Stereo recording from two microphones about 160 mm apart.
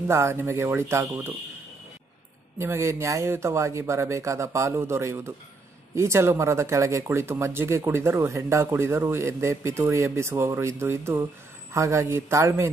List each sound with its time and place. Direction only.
0.1 s speech: 15° right (ahead or behind)
2.6 s a man's voice: 15° right (ahead or behind)